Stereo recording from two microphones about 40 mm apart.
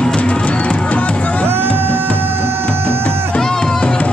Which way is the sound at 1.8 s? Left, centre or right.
Right.